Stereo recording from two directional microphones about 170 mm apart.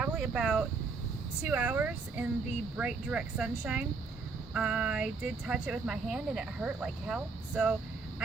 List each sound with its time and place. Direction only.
0.0 s speech: 5° right (ahead or behind)